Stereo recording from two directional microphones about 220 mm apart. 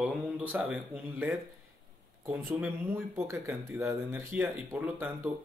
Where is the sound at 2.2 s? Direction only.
10° right (ahead or behind).